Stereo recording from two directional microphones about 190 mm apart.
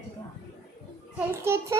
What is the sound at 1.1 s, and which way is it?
Speech, 15° right (ahead or behind).